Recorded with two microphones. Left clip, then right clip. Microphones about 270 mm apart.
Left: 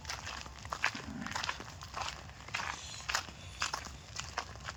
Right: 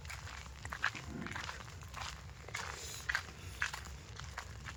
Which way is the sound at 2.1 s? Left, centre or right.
Left.